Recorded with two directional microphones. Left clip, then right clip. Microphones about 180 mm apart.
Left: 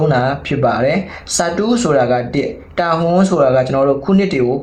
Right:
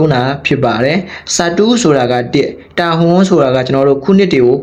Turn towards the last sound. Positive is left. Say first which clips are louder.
# right 6 dB
turn(degrees=-40)  # may be behind; listen again after turning